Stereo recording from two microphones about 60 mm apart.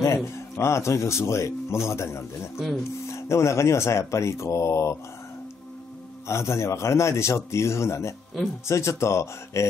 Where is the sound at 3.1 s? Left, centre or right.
Left.